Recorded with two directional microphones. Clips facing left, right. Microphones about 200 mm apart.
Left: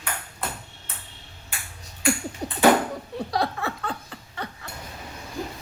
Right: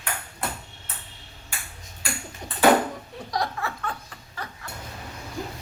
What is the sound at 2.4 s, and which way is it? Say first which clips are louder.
Ping: left 7 dB; 35° left (ahead or behind).